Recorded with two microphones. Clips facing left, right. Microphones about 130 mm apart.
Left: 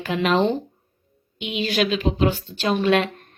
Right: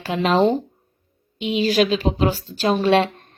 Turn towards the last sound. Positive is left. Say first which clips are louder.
# right 2 dB
turn(degrees=-35)  # may be behind; listen again after turning